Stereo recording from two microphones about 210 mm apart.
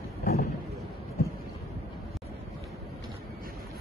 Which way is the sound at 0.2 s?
45° left (ahead or behind).